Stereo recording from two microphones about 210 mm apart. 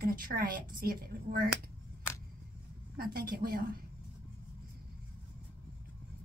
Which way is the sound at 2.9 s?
45° right (ahead or behind).